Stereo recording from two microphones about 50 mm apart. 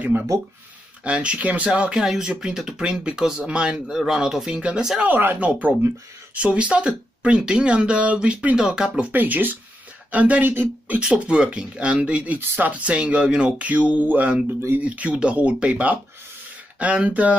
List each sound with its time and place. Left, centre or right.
1.0 s speech: right
5.0 s speech: right
5.4 s speech: right
9.1 s speech: right
11.0 s speech: right
12.4 s speech: right